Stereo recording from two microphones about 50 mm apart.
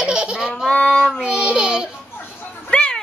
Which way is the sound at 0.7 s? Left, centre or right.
Centre.